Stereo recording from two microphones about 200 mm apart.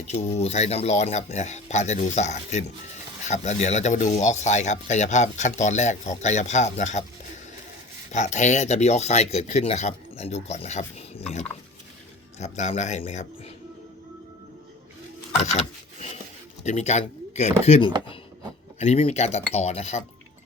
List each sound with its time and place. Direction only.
0.1 s speech: 30° left (ahead or behind)
8.1 s speech: 35° left (ahead or behind)
15.4 s rub: 35° left (ahead or behind)
16.6 s speech: 35° left (ahead or behind)